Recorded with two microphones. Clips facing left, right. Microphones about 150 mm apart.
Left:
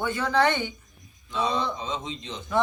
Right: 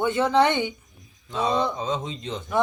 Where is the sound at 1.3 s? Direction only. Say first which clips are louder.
Right 3 dB; 50° right (ahead or behind).